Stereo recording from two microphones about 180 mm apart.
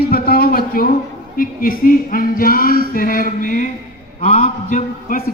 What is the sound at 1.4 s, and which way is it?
A man's voice, 50° left (ahead or behind).